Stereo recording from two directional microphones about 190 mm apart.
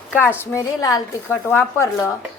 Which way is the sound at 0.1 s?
10° left (ahead or behind).